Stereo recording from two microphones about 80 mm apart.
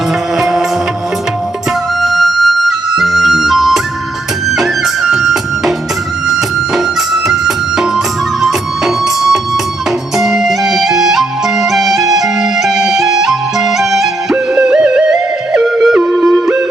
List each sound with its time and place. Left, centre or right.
0.3 s music: centre
2.0 s music: centre